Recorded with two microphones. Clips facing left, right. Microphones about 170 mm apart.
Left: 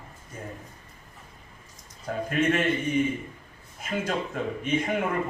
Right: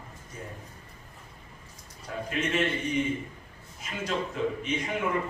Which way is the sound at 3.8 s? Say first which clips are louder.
Left 3 dB; 50° left (ahead or behind).